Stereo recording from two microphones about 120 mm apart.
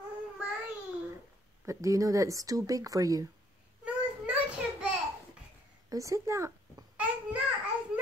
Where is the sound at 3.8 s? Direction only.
10° right (ahead or behind).